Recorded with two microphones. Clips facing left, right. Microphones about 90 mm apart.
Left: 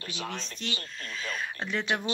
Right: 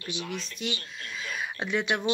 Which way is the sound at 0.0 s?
35° left (ahead or behind).